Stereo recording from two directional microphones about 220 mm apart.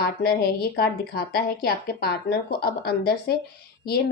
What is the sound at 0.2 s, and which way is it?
A woman's voice, 45° left (ahead or behind).